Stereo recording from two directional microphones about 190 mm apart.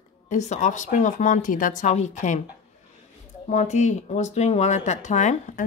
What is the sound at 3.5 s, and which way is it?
Speech, 35° left (ahead or behind).